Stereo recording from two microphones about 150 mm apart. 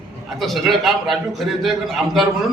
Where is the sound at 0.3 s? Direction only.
Centre (ahead or behind).